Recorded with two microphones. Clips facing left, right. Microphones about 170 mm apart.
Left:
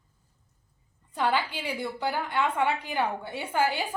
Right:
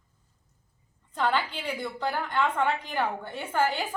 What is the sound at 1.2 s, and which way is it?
A woman's voice, 10° left (ahead or behind).